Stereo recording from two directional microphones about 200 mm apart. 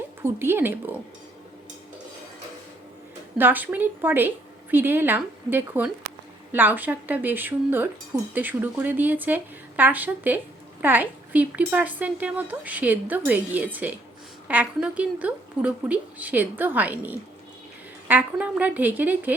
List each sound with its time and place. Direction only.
0.2 s speech: 10° right (ahead or behind)
3.3 s speech: 10° right (ahead or behind)